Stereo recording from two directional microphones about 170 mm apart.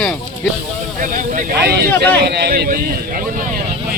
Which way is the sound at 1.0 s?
50° right (ahead or behind).